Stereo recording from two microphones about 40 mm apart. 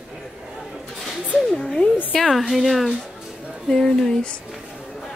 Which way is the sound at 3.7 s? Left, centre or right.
Centre.